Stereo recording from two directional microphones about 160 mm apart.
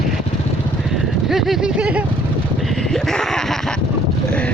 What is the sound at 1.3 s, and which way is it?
Speech, centre (ahead or behind).